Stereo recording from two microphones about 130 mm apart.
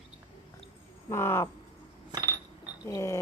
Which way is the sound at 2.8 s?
25° left (ahead or behind).